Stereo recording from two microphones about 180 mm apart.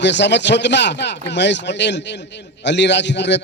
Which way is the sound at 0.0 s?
75° left (ahead or behind).